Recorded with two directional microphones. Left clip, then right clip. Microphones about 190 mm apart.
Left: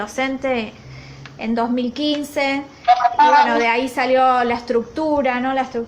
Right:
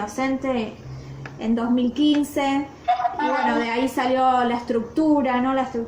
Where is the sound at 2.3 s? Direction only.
30° left (ahead or behind).